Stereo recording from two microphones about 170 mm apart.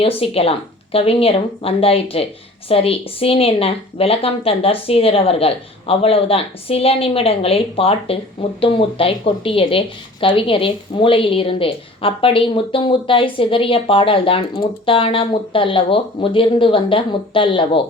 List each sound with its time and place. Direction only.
0.0 s a woman's voice: 35° left (ahead or behind)